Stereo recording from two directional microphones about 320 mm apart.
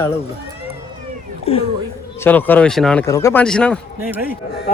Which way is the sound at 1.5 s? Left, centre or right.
Centre.